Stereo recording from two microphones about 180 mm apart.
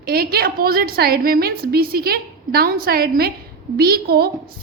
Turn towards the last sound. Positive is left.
turn(degrees=-60)  # may be behind; listen again after turning